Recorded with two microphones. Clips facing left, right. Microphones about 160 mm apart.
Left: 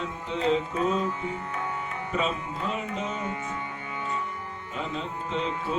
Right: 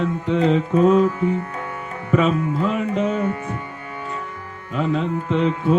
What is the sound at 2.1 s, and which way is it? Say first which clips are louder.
Music: right 12 dB; 60° right (ahead or behind).